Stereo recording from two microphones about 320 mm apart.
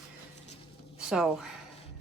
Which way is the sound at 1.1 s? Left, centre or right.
Centre.